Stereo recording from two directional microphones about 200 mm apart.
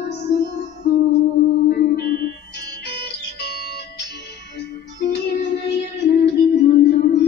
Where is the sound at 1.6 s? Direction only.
60° left (ahead or behind).